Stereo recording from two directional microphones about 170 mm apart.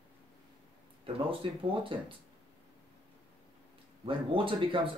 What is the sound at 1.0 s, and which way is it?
Speech, 30° right (ahead or behind).